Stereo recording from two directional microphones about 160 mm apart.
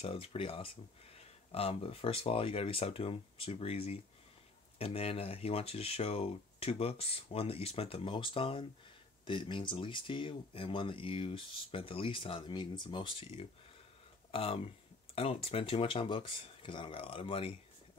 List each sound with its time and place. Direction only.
0.0 s speech: 35° left (ahead or behind)
14.3 s speech: 35° left (ahead or behind)